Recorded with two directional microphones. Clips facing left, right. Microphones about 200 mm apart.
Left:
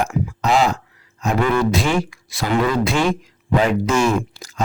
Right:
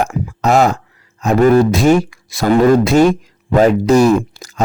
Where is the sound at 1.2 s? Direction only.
40° right (ahead or behind).